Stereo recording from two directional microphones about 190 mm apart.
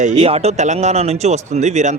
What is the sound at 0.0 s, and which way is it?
Speech, 35° right (ahead or behind).